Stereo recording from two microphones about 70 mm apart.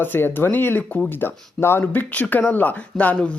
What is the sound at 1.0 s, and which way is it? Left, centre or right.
Speech, left.